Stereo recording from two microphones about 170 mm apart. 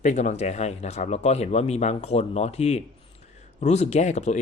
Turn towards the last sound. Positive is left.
turn(degrees=45)  # may be behind; listen again after turning